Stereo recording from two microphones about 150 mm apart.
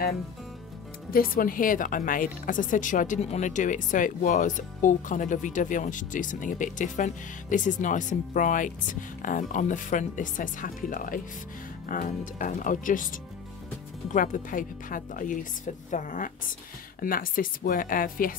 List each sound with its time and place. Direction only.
1.1 s speech: 70° left (ahead or behind)
17.0 s speech: 70° left (ahead or behind)